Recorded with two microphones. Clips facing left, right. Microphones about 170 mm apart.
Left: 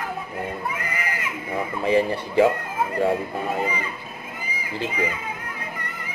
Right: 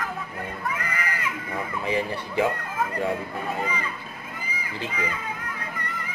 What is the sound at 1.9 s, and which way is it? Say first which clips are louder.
Speech: left 7 dB; 35° left (ahead or behind).